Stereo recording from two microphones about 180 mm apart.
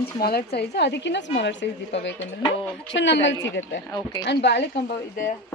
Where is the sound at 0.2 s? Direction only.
60° left (ahead or behind); by 3.8 s 85° left.